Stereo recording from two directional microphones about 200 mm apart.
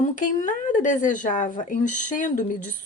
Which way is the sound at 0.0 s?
40° left (ahead or behind).